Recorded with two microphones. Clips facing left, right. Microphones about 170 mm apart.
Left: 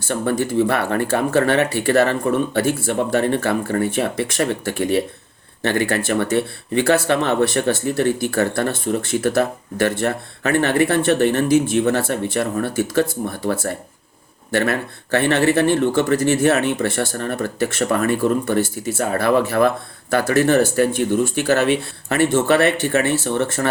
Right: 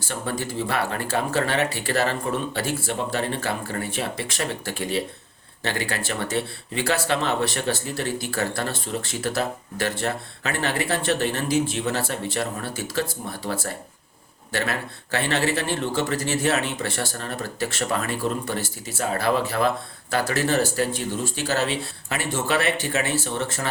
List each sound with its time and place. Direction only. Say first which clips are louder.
0.1 s speech: left 9 dB; 55° left (ahead or behind)